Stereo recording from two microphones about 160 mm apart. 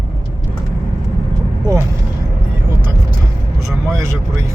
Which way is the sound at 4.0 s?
20° right (ahead or behind).